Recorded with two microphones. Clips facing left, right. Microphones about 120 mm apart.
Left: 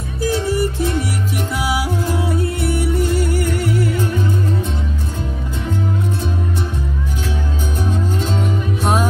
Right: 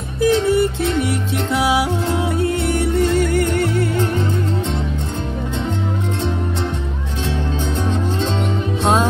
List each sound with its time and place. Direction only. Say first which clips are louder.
0.3 s music: right 3 dB; 20° right (ahead or behind)